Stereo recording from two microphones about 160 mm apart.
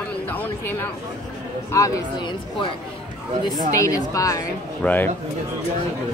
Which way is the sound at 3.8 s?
20° left (ahead or behind).